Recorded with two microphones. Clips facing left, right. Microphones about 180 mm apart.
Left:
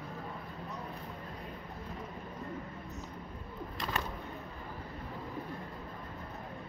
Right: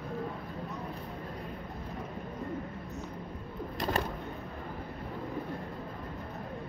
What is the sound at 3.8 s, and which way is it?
Bird, 45° right (ahead or behind).